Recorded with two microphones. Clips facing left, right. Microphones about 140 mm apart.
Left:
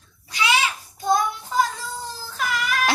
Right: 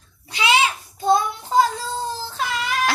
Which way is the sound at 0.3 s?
25° right (ahead or behind).